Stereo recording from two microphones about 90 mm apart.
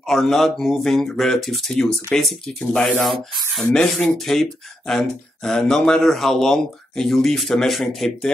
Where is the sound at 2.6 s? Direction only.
15° left (ahead or behind).